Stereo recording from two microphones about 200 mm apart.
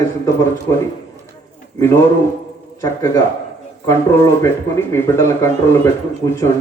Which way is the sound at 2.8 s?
15° left (ahead or behind).